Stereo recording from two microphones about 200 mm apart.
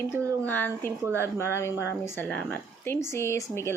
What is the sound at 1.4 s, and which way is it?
Speech, 15° left (ahead or behind).